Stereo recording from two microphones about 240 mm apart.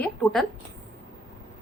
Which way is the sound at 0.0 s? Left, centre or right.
Centre.